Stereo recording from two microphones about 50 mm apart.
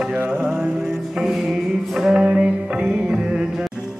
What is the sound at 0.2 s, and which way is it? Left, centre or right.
Mantra, right.